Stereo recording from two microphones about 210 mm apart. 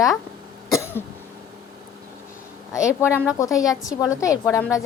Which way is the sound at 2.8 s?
10° left (ahead or behind).